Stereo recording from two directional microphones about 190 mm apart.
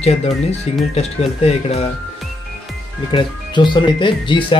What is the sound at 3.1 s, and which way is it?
Speech, 25° left (ahead or behind).